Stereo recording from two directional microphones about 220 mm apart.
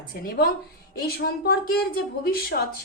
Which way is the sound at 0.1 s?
40° left (ahead or behind).